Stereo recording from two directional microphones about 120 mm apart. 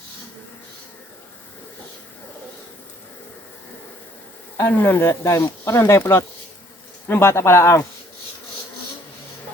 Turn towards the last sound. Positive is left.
turn(degrees=20)  # may be behind; listen again after turning